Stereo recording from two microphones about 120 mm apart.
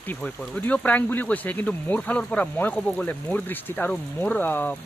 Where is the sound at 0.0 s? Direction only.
15° left (ahead or behind).